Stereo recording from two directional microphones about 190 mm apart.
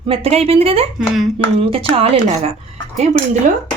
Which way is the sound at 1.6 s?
30° right (ahead or behind).